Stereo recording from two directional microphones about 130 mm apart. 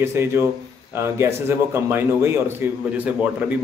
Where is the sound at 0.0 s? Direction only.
20° right (ahead or behind).